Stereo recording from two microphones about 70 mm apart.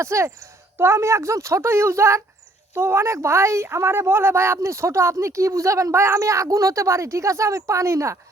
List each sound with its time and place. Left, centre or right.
0.0 s a woman's voice: right